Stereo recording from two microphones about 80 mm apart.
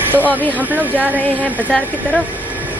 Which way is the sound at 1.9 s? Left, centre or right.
Right.